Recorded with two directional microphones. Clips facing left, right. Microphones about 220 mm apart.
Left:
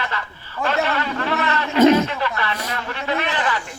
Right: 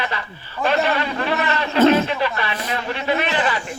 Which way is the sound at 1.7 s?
15° left (ahead or behind).